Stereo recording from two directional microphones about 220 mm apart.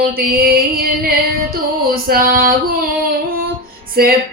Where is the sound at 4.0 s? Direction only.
45° right (ahead or behind).